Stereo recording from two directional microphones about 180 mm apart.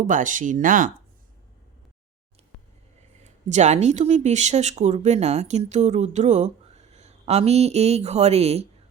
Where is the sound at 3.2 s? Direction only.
40° right (ahead or behind).